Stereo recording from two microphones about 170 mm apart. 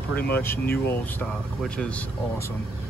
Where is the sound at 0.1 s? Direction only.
10° left (ahead or behind).